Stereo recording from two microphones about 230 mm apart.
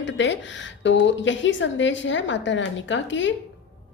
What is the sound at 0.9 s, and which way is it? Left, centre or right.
A woman's voice, left.